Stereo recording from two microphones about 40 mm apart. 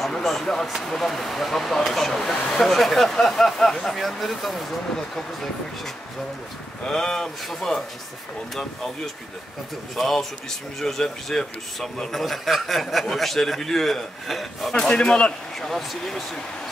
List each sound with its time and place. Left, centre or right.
0.0 s a man's voice: centre
6.9 s speech: centre
8.5 s speech: centre
12.1 s a man's voice: centre
14.7 s speech: left
15.7 s a man's voice: centre